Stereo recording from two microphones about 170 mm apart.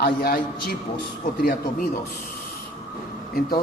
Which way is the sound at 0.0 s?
65° left (ahead or behind).